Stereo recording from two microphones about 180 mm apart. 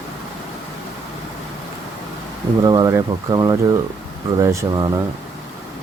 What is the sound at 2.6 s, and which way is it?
Mantra, 20° right (ahead or behind).